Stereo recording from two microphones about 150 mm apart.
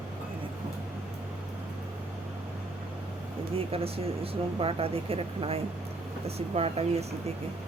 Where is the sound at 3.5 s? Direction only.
40° right (ahead or behind).